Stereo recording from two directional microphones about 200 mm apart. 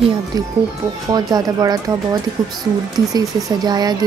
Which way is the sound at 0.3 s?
20° right (ahead or behind).